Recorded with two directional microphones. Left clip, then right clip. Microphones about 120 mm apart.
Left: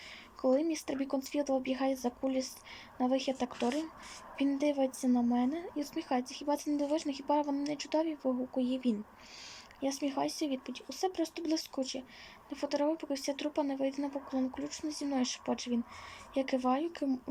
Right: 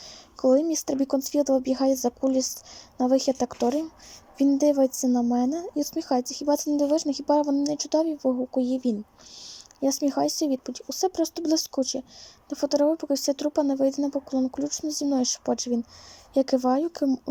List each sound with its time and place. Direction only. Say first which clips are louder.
0.4 s speech: right 9 dB; 40° right (ahead or behind)
4.5 s speech: right 11 dB; 45° right (ahead or behind)